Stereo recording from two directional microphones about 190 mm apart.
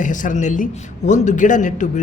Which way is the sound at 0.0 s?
40° left (ahead or behind).